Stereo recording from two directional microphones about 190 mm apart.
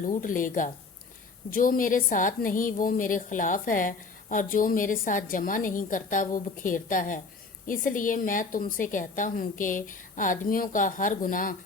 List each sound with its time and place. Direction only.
0.0 s a woman's voice: 45° left (ahead or behind)